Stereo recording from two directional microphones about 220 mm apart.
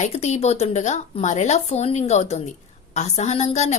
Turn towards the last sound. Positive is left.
turn(degrees=30)  # may be behind; listen again after turning